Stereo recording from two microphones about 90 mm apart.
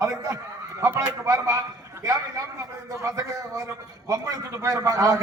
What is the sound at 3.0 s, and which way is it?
A man's voice, 35° right (ahead or behind).